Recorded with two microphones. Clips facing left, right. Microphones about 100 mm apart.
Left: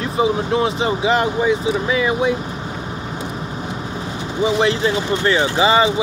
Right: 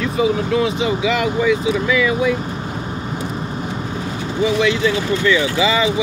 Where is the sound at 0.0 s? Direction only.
30° left (ahead or behind).